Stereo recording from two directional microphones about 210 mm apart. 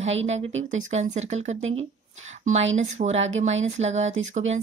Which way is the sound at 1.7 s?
35° right (ahead or behind).